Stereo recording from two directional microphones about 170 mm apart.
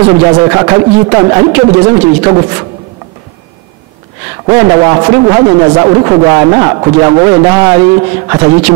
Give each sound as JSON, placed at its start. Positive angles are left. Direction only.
{"t": 0.0, "sound": "speech", "side_deg": -25}
{"t": 4.6, "sound": "speech", "side_deg": -20}
{"t": 7.8, "sound": "a man's voice", "side_deg": -30}